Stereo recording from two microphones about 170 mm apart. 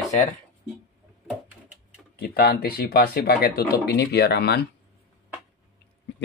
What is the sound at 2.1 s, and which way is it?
Speech, 65° left (ahead or behind).